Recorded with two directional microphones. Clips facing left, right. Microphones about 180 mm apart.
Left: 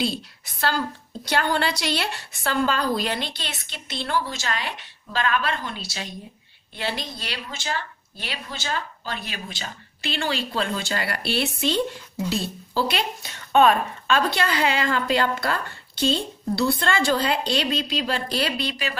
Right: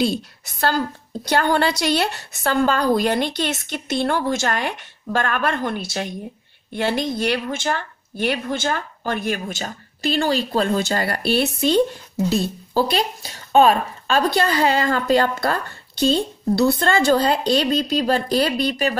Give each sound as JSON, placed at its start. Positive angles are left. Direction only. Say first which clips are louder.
{"t": 0.0, "sound": "speech", "louder": "right 5 dB", "side_deg": -45}